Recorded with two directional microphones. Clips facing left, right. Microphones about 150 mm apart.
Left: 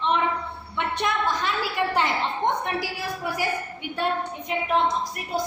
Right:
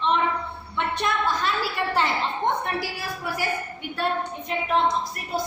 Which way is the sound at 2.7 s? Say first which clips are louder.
Left 1 dB; 15° left (ahead or behind).